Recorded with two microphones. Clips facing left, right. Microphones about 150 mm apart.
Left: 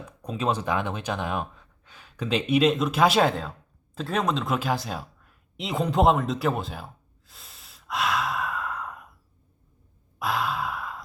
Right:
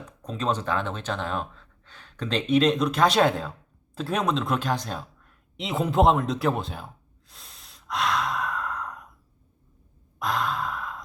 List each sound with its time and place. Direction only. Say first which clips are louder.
0.2 s speech: left 1 dB; 10° left (ahead or behind)
3.9 s a sound: even; centre (ahead or behind)
10.2 s sigh: even; 5° left (ahead or behind)